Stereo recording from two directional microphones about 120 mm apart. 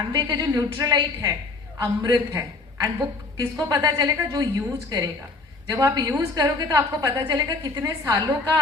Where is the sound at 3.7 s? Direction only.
30° right (ahead or behind).